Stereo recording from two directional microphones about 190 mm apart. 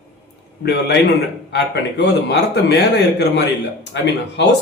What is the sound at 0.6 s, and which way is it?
Speech, 60° left (ahead or behind).